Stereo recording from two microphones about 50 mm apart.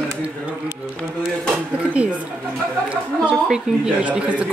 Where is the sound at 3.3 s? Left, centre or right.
Centre.